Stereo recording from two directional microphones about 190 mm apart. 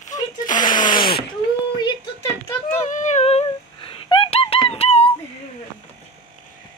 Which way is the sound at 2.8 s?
40° left (ahead or behind).